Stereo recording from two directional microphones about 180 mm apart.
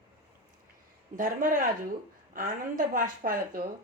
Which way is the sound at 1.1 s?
50° right (ahead or behind).